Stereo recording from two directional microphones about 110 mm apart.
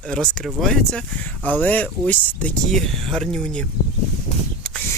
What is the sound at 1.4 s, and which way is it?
A man's voice, 15° left (ahead or behind).